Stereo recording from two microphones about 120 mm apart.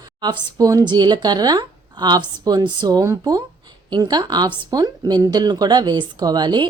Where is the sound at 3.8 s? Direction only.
40° right (ahead or behind).